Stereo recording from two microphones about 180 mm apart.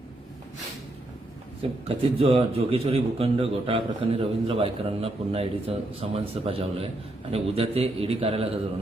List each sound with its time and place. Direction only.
2.0 s a man's voice: 30° right (ahead or behind)